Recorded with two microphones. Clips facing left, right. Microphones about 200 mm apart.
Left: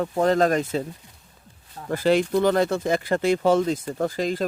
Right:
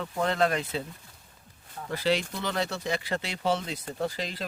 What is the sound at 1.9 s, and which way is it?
Speech, 50° left (ahead or behind).